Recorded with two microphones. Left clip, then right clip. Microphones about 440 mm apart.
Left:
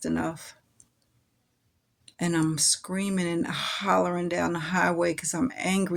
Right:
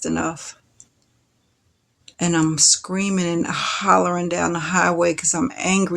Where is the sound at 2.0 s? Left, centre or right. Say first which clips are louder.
Right 7 dB; left.